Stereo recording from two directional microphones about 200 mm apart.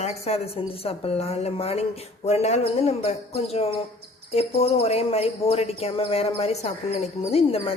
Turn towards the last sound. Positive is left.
turn(degrees=30)  # may be behind; listen again after turning